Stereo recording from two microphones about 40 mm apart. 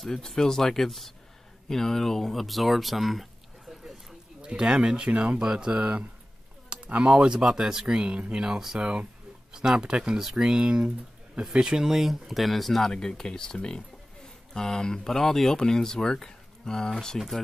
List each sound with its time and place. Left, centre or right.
0.0 s speech: centre
4.4 s speech: right
6.9 s speech: right
12.0 s speech: centre
12.9 s speech: centre